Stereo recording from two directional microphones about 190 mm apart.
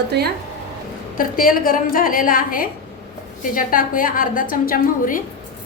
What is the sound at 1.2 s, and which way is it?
A woman's voice, 50° left (ahead or behind).